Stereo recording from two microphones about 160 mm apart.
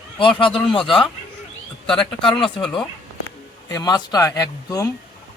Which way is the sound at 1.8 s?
5° left (ahead or behind).